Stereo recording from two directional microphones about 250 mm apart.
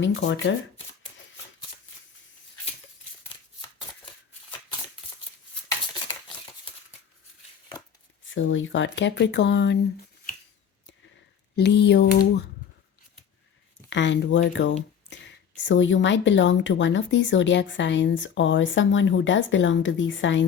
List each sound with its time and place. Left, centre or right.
0.0 s speech: left
8.3 s speech: left
11.5 s a sound: left
13.9 s speech: left